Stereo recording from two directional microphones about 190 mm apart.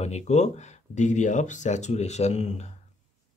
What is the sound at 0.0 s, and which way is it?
Speech, 35° left (ahead or behind).